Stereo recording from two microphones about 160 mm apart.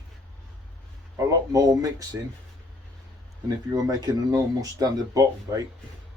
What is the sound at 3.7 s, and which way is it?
Speech, 20° right (ahead or behind).